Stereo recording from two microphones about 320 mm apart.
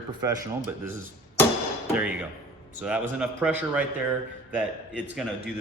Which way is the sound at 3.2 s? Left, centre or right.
Centre.